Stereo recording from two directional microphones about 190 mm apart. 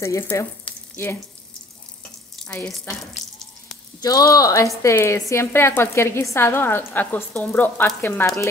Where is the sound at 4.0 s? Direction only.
20° left (ahead or behind).